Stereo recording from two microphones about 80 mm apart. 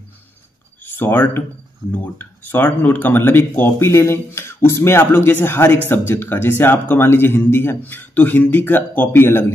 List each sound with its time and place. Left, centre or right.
0.8 s speech: left